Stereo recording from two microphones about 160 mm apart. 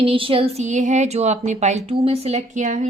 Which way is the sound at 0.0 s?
35° right (ahead or behind).